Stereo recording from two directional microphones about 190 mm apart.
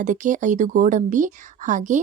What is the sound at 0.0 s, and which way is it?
Speech, 40° right (ahead or behind).